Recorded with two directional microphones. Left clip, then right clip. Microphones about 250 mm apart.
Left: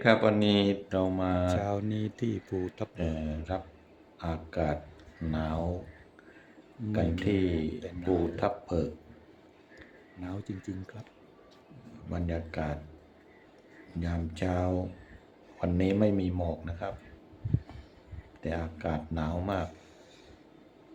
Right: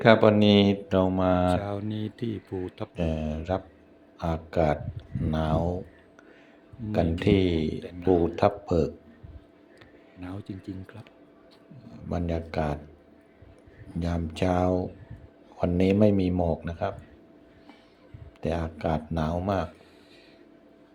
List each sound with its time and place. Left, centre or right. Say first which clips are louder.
0.0 s speech: right 6 dB; right
1.5 s speech: right 1 dB; centre
2.9 s speech: right 5 dB; right
7.3 s speech: right 7 dB; right
7.8 s speech: right 9 dB; centre
8.4 s speech: right 7 dB; centre
10.2 s speech: right 1 dB; centre
12.0 s speech: right 5 dB; centre
14.0 s speech: right 6 dB; centre
18.3 s speech: right 5 dB; centre